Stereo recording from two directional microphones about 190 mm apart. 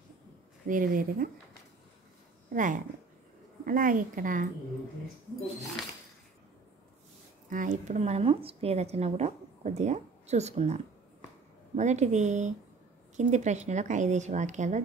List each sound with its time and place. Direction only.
0.7 s a woman's voice: 45° right (ahead or behind)
2.5 s a woman's voice: 45° right (ahead or behind)
7.4 s speech: 40° right (ahead or behind)